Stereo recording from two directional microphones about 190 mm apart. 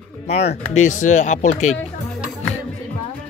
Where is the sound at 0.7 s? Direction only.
40° left (ahead or behind).